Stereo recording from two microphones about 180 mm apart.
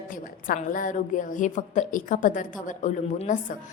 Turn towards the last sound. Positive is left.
turn(degrees=45)  # may be behind; listen again after turning